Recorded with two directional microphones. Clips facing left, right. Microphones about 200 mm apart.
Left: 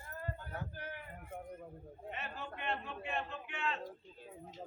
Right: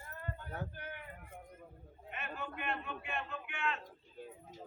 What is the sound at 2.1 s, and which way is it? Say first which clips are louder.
A man's voice: right 2 dB; 30° left (ahead or behind).